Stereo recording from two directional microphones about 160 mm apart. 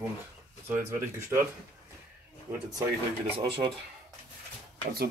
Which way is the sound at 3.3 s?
35° right (ahead or behind).